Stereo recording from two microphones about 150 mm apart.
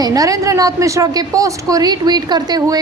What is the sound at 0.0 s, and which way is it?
A woman's voice, 25° right (ahead or behind).